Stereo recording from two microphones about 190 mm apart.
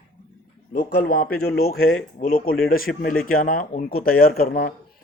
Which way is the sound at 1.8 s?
90° left.